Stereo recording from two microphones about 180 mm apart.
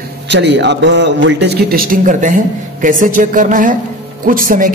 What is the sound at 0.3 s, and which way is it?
A man's voice, 75° right (ahead or behind).